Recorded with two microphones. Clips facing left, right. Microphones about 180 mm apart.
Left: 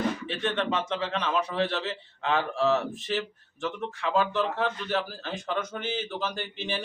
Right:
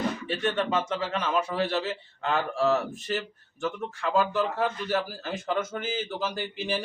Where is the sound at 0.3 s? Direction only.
5° right (ahead or behind).